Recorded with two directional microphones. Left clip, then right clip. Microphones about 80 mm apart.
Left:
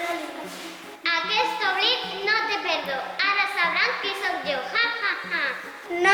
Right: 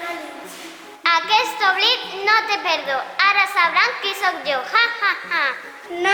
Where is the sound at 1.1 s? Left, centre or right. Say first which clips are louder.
Right 5 dB; right.